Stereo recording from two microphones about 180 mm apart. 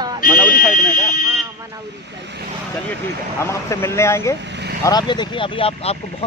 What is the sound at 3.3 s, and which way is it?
Speech, 15° left (ahead or behind).